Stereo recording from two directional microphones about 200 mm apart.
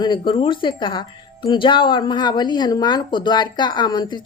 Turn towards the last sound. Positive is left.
turn(degrees=20)  # may be behind; listen again after turning